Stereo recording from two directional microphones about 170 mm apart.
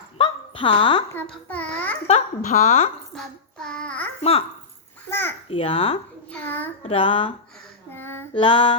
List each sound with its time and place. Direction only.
0.2 s a sound: 30° left (ahead or behind)
1.1 s speech: 10° left (ahead or behind)
2.0 s a woman's voice: 40° left (ahead or behind)
3.2 s child singing: 5° left (ahead or behind)
4.2 s a woman's voice: 35° left (ahead or behind)
5.5 s a woman's voice: 35° left (ahead or behind)
7.9 s child singing: 15° left (ahead or behind)
8.4 s speech: 30° left (ahead or behind)